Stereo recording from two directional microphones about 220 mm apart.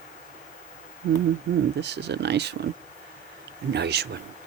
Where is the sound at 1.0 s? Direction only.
40° right (ahead or behind).